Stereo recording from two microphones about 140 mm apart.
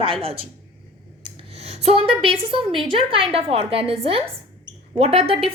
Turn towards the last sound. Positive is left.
turn(degrees=-45)  # may be behind; listen again after turning